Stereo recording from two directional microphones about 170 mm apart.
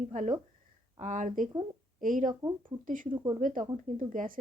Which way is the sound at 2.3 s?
20° right (ahead or behind).